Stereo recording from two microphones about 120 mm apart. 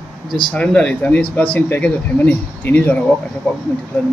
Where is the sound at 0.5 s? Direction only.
10° left (ahead or behind).